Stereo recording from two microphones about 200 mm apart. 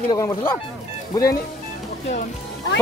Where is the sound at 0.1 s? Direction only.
15° left (ahead or behind).